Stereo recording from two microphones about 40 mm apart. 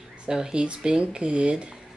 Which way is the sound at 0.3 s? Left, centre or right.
Centre.